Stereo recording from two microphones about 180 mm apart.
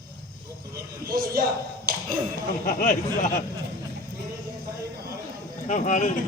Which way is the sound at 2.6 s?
45° left (ahead or behind).